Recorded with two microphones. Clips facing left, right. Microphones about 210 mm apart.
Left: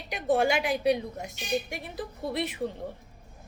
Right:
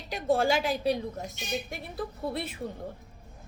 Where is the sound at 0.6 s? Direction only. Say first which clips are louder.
Left 2 dB; 65° left (ahead or behind).